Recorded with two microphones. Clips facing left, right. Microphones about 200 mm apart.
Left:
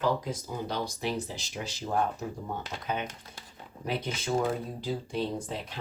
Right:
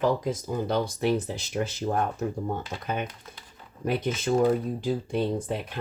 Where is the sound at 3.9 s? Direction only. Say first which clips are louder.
Right 5 dB; 50° right (ahead or behind).